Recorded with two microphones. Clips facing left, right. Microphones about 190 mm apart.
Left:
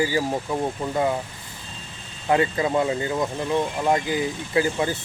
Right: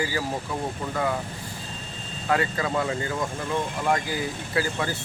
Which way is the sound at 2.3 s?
20° left (ahead or behind).